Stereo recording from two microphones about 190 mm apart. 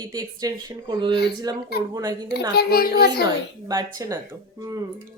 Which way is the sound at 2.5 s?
55° left (ahead or behind).